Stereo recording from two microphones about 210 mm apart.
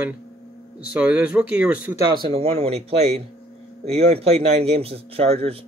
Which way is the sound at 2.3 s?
25° right (ahead or behind).